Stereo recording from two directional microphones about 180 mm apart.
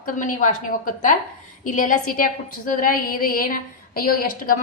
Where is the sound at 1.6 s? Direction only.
45° left (ahead or behind).